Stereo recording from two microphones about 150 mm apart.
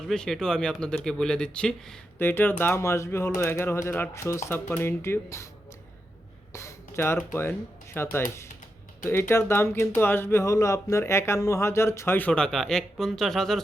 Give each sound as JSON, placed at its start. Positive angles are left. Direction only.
{"t": 0.1, "sound": "speech", "side_deg": 5}
{"t": 6.5, "sound": "a sound", "side_deg": 20}
{"t": 7.9, "sound": "speech", "side_deg": 15}